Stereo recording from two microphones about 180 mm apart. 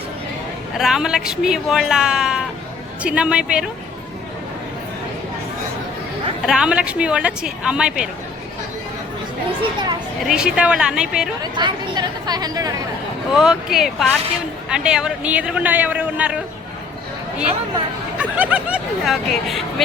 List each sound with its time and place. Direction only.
0.8 s a woman's voice: 5° right (ahead or behind)
6.4 s a woman's voice: 5° right (ahead or behind)
10.2 s a woman's voice: 5° right (ahead or behind)
11.5 s speech: 25° right (ahead or behind)
13.3 s a woman's voice: 5° right (ahead or behind)
18.2 s a woman's voice: 5° right (ahead or behind)